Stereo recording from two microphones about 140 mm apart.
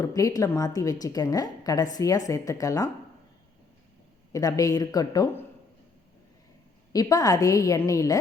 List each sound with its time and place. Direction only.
0.0 s a woman's voice: 25° left (ahead or behind)
4.3 s a woman's voice: 25° left (ahead or behind)
6.9 s a woman's voice: 25° left (ahead or behind)